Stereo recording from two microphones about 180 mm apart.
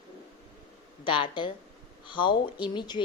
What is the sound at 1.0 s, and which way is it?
Speech, 25° left (ahead or behind).